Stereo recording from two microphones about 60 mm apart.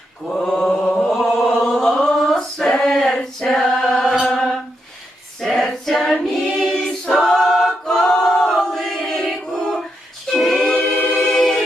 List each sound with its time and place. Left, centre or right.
0.3 s mantra: centre
1.1 s a capella: centre
3.2 s female singing: centre
3.8 s chant: centre
5.4 s female singing: centre
6.2 s a capella: centre
10.3 s choir: centre
10.8 s choir: left
11.1 s choir: centre